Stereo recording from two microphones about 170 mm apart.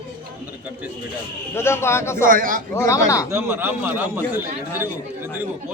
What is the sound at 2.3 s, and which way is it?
Speech, 55° right (ahead or behind).